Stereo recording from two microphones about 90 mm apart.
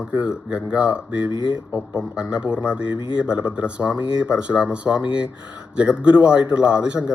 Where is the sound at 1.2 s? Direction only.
60° left (ahead or behind).